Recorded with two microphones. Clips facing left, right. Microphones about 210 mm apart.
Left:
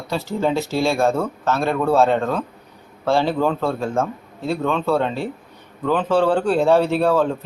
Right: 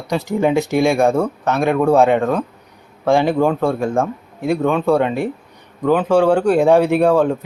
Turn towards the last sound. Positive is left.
turn(degrees=-15)  # may be behind; listen again after turning